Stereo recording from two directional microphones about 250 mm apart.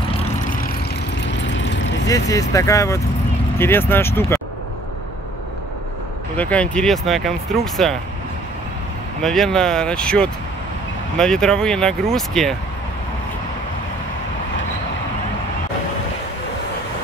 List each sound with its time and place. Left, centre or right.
1.8 s vehicle: left
2.0 s speech: centre
6.3 s speech: centre
9.2 s speech: centre